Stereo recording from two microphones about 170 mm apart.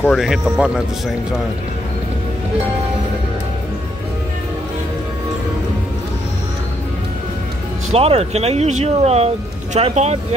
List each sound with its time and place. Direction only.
0.1 s speech: 5° right (ahead or behind)
7.9 s speech: 35° right (ahead or behind)